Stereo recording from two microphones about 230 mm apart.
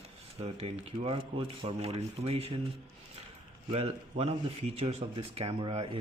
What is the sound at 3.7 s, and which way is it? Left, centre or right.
Speech, right.